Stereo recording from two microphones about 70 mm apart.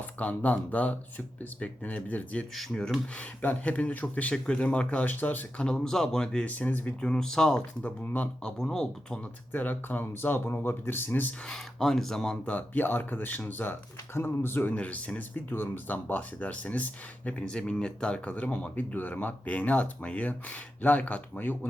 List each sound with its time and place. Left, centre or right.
0.0 s speech: left
5.5 s speech: centre
6.5 s speech: left
7.0 s speech: centre
7.8 s speech: left
8.5 s speech: centre
9.5 s speech: left
11.4 s speech: centre
12.5 s speech: left
15.4 s speech: left